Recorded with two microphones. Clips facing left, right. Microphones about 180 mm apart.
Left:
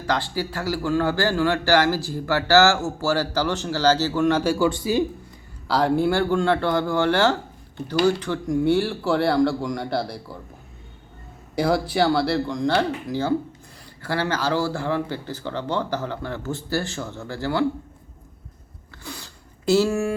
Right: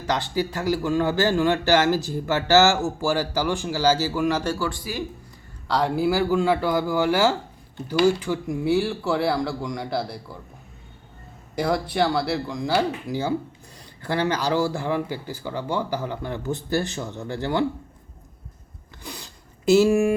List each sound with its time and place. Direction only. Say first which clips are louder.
0.1 s speech: right 1 dB; 20° right (ahead or behind); by 4.4 s 5° right (ahead or behind)
4.6 s speech: left 8 dB; 25° left (ahead or behind)
5.6 s speech: left 2 dB; centre (ahead or behind)
11.5 s speech: left 2 dB; centre (ahead or behind); by 17.7 s 20° right (ahead or behind)
19.0 s a sound: left 1 dB; 15° right (ahead or behind)